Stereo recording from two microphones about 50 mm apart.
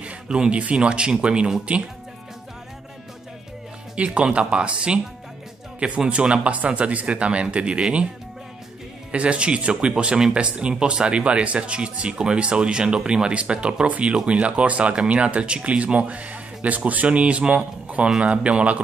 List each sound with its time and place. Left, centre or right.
0.0 s speech: right
3.9 s speech: right
9.1 s speech: right